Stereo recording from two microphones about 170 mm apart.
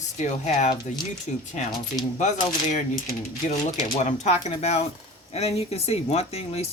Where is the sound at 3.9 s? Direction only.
45° left (ahead or behind).